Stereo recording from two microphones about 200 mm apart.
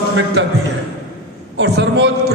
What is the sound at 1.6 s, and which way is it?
Speech, 60° right (ahead or behind).